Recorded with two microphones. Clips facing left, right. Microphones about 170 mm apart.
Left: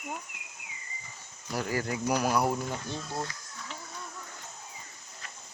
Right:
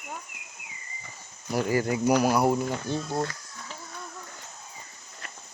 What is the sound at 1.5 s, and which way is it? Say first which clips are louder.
Speech: right 6 dB; 15° right (ahead or behind).